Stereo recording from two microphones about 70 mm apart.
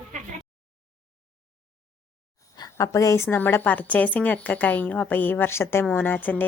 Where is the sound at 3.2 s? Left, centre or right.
Left.